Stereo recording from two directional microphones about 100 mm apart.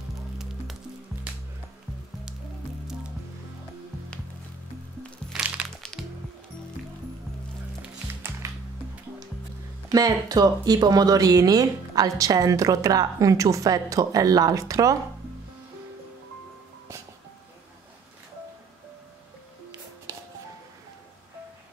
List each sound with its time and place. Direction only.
5.3 s music: 10° right (ahead or behind)
8.1 s music: 25° right (ahead or behind)
9.9 s speech: 40° right (ahead or behind)